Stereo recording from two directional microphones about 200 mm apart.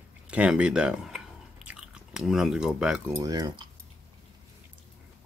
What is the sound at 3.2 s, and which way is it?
Speech, 20° right (ahead or behind).